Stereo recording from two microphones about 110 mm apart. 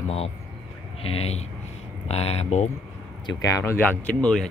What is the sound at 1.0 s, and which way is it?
Speech, 70° left (ahead or behind).